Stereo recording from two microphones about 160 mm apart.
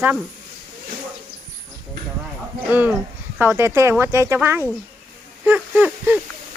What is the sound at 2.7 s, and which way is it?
Speech, 10° right (ahead or behind).